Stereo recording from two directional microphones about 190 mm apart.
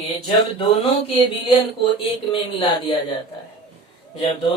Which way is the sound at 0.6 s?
30° left (ahead or behind).